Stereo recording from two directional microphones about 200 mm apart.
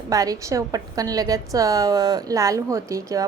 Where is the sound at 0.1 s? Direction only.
15° right (ahead or behind).